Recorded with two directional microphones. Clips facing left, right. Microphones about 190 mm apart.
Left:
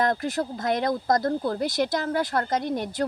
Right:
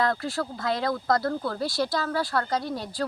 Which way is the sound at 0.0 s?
20° left (ahead or behind).